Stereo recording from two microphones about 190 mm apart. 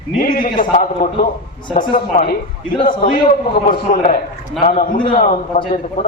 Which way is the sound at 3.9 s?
40° left (ahead or behind).